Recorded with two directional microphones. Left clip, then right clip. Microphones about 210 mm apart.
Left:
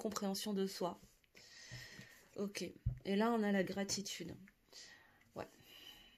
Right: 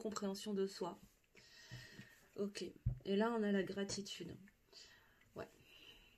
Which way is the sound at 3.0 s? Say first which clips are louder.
Left 2 dB; 45° left (ahead or behind).